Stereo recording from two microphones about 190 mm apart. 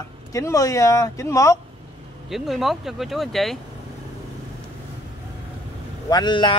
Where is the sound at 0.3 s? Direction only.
15° left (ahead or behind).